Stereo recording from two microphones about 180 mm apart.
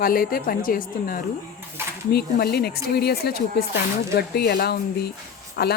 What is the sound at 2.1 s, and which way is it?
A woman's voice, 60° left (ahead or behind).